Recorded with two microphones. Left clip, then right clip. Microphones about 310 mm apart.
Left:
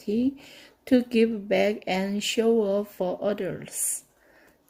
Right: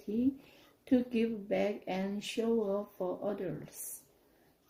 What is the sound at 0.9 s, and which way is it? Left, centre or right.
Speech, left.